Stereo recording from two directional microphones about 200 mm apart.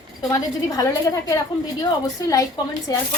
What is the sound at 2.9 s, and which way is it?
Speech, 20° left (ahead or behind).